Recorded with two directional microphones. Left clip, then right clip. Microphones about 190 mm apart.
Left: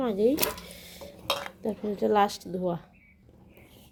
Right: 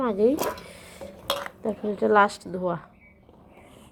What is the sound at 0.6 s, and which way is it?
Dishes, 10° left (ahead or behind).